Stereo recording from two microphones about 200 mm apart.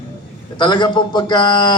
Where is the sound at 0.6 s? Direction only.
20° left (ahead or behind).